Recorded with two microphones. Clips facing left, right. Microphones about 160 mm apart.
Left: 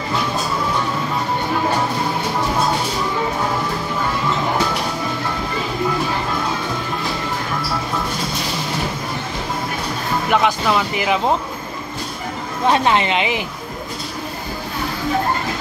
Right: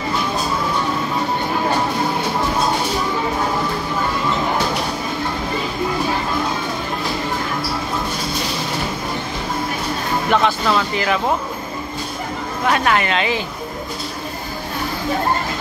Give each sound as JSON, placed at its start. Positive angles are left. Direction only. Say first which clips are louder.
{"t": 10.3, "sound": "speech", "louder": "even", "side_deg": 15}
{"t": 12.6, "sound": "speech", "louder": "left 2 dB", "side_deg": 25}